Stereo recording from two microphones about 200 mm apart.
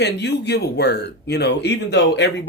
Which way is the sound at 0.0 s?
55° left (ahead or behind).